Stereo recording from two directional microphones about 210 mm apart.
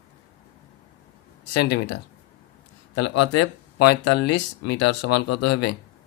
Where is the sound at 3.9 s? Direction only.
55° left (ahead or behind).